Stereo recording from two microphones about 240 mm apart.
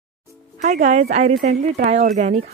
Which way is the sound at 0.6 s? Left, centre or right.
Right.